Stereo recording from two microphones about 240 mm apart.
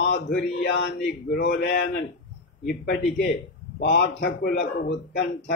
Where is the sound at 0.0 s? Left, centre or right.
Left.